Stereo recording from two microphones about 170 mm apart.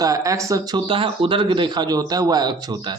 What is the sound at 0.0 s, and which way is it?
Speech, 20° right (ahead or behind).